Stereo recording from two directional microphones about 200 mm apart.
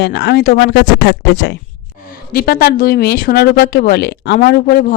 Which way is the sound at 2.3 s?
45° left (ahead or behind).